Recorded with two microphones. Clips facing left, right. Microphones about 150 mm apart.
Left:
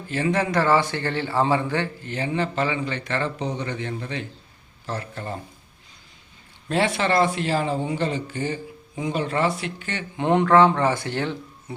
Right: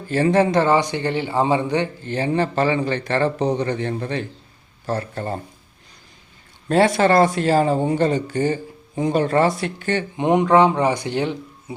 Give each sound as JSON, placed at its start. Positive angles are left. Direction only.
{"t": 0.1, "sound": "a man's voice", "side_deg": -35}
{"t": 2.0, "sound": "speech", "side_deg": -35}
{"t": 6.7, "sound": "speech", "side_deg": -40}
{"t": 10.2, "sound": "speech", "side_deg": -15}